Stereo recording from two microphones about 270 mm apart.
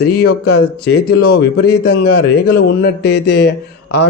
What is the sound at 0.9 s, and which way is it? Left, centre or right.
Speech, left.